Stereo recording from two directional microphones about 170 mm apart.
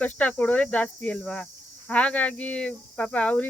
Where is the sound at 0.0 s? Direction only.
10° left (ahead or behind).